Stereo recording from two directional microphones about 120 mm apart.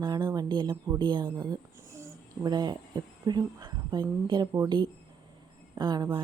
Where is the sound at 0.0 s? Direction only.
35° right (ahead or behind).